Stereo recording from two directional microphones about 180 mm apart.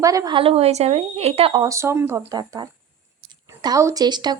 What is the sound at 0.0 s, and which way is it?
Speech, 20° right (ahead or behind).